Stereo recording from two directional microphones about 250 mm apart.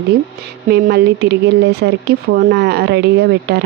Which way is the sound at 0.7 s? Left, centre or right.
Right.